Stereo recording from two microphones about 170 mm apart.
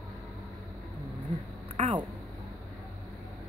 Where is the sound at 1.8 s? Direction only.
40° right (ahead or behind).